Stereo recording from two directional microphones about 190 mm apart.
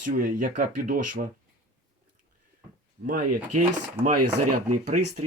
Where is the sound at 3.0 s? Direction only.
45° right (ahead or behind).